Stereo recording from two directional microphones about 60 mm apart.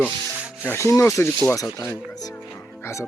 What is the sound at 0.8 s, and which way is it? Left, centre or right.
Speech, left.